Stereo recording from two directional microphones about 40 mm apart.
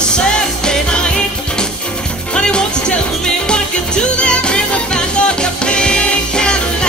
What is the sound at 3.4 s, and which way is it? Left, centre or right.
Music, left.